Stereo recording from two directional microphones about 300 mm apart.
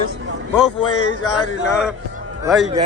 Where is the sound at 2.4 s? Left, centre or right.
Centre.